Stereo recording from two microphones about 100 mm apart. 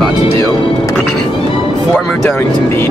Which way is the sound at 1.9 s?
5° left (ahead or behind).